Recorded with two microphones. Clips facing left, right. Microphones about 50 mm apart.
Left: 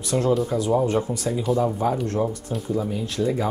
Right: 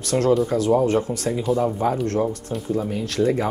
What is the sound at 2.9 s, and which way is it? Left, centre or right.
Speech, right.